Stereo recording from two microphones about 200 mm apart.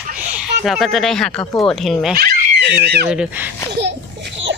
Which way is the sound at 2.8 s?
50° right (ahead or behind).